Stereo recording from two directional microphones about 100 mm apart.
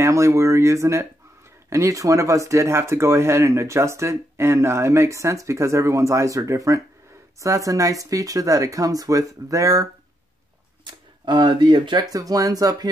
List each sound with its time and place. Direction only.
0.0 s speech: 30° right (ahead or behind)
10.8 s speech: 50° right (ahead or behind)